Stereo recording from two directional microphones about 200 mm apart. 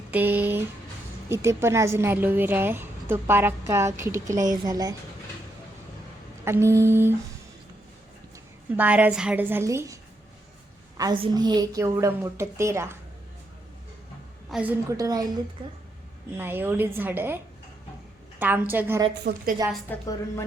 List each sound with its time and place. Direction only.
0.1 s a woman's voice: 10° right (ahead or behind)
6.4 s a woman's voice: 15° right (ahead or behind)
8.7 s a woman's voice: 10° right (ahead or behind)
14.5 s a woman's voice: 10° right (ahead or behind)
16.4 s a woman's voice: 10° right (ahead or behind)
19.3 s a woman's voice: 55° right (ahead or behind)
19.9 s a woman's voice: 10° left (ahead or behind)